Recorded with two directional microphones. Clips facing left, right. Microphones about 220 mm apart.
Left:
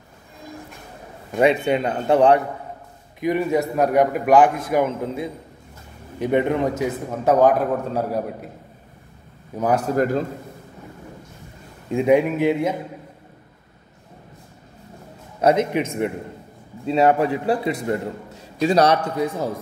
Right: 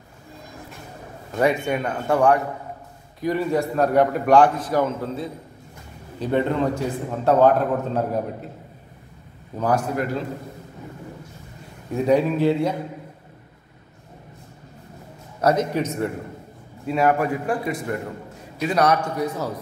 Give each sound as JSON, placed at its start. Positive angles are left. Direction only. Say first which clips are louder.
{"t": 1.4, "sound": "a man's voice", "louder": "left 3 dB", "side_deg": 20}
{"t": 9.9, "sound": "a man's voice", "louder": "left 5 dB", "side_deg": 45}
{"t": 11.9, "sound": "a man's voice", "louder": "left 2 dB", "side_deg": 15}
{"t": 15.4, "sound": "a man's voice", "louder": "left 2 dB", "side_deg": 20}